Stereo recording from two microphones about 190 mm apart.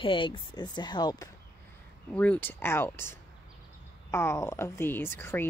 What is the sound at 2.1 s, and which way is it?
A woman's voice, 10° left (ahead or behind).